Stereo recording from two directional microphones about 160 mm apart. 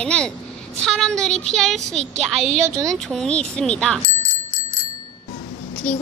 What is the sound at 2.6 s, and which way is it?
Speech, 20° right (ahead or behind).